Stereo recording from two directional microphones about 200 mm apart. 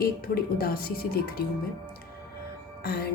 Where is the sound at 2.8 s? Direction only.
50° left (ahead or behind).